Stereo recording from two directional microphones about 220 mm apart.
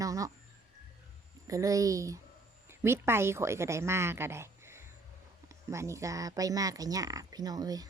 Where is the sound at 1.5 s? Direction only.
15° right (ahead or behind).